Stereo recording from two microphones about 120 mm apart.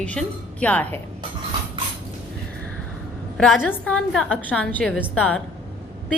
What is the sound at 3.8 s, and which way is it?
A woman's voice, 5° left (ahead or behind).